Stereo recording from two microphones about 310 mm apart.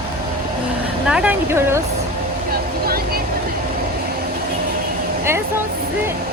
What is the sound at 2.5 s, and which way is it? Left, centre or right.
Vehicle, right.